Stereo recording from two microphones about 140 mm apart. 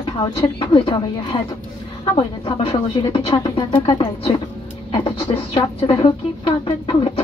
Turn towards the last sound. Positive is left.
turn(degrees=35)  # may be behind; listen again after turning